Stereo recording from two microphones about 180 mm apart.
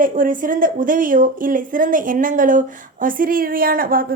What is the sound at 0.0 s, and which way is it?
Speech, 50° right (ahead or behind).